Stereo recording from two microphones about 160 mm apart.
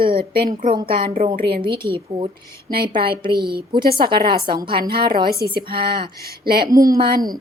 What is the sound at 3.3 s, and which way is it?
Speech, 75° right (ahead or behind).